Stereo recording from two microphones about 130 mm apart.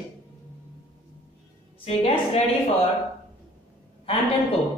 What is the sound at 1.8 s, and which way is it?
Speech, 50° left (ahead or behind).